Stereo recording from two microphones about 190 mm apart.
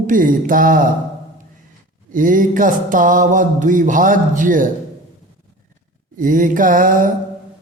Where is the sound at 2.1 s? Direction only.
45° right (ahead or behind).